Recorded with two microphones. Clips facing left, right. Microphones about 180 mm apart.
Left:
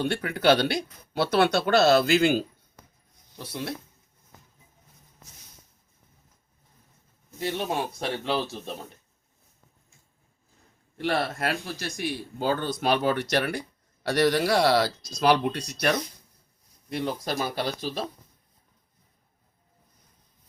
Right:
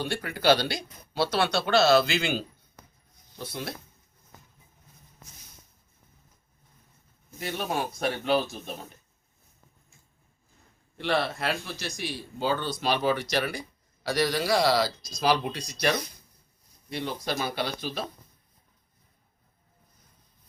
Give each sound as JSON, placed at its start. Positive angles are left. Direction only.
{"t": 0.1, "sound": "speech", "side_deg": 65}
{"t": 7.3, "sound": "a man's voice", "side_deg": 25}
{"t": 10.9, "sound": "speech", "side_deg": 45}
{"t": 16.9, "sound": "speech", "side_deg": 45}